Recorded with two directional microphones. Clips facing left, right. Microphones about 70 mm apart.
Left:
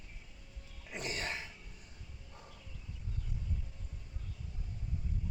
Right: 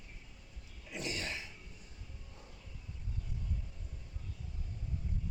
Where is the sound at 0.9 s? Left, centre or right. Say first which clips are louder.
Left 1 dB; left.